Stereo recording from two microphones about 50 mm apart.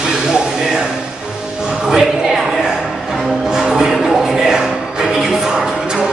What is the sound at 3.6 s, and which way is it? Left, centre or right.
Music, centre.